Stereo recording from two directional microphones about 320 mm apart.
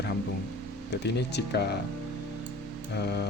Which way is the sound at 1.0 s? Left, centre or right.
Left.